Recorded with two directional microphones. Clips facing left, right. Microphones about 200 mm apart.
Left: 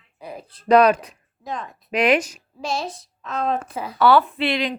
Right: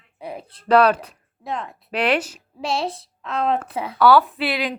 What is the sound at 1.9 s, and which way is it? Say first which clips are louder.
Speech: left 3 dB; 10° left (ahead or behind).